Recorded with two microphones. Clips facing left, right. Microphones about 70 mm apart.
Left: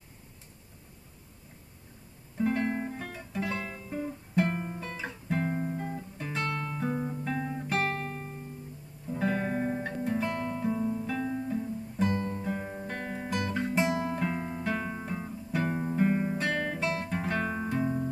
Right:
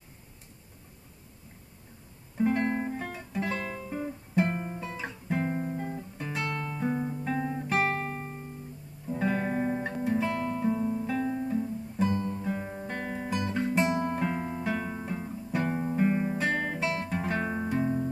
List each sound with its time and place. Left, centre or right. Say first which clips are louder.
2.3 s guitar: right 2 dB; centre
2.8 s music: right 3 dB; centre
4.4 s guitar: right 1 dB; centre
9.1 s music: right 1 dB; centre
12.1 s music: right 1 dB; left
12.4 s guitar: right 1 dB; centre
13.5 s music: right 2 dB; centre
14.9 s guitar: right 1 dB; centre
17.3 s music: right 1 dB; centre